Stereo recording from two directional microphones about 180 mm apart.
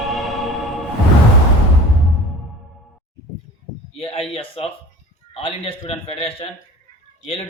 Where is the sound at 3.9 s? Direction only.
35° left (ahead or behind).